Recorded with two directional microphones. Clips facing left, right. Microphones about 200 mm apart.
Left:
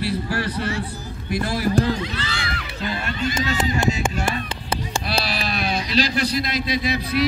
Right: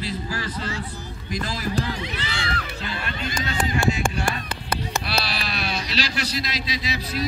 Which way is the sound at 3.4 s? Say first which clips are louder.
Even; 20° left (ahead or behind).